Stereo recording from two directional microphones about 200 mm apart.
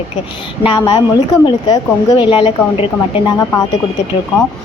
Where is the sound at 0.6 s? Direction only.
25° left (ahead or behind).